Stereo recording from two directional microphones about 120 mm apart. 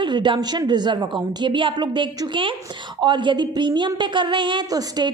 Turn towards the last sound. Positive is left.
turn(degrees=-35)  # may be behind; listen again after turning